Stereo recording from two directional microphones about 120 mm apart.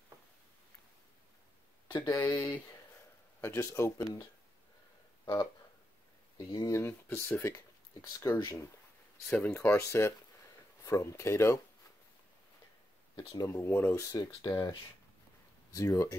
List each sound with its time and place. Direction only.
2.0 s speech: 25° left (ahead or behind)
13.5 s speech: 20° left (ahead or behind)
14.1 s speech: 30° left (ahead or behind)